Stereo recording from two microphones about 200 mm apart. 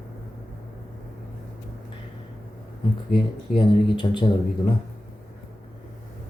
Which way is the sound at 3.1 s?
25° left (ahead or behind).